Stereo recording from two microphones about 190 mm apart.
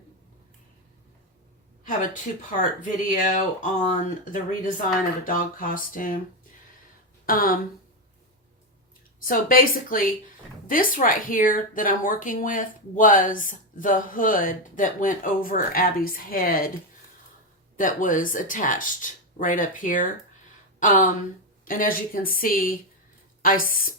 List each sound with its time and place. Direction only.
2.5 s speech: 45° left (ahead or behind)
7.3 s speech: 50° left (ahead or behind)
9.2 s speech: 45° left (ahead or behind)
17.7 s speech: 45° left (ahead or behind)